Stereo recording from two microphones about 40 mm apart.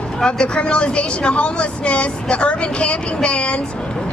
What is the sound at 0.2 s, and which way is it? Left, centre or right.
Speech, left.